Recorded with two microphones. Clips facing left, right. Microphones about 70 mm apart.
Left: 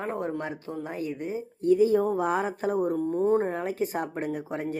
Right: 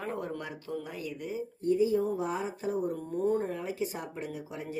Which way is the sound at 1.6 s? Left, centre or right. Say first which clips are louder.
Left 6 dB; left.